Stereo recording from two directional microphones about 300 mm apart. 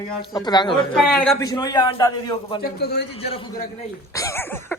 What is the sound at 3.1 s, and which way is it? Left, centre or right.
A man's voice, centre.